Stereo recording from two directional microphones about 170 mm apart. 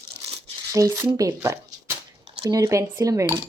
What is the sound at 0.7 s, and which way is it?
Cutlery, 20° right (ahead or behind).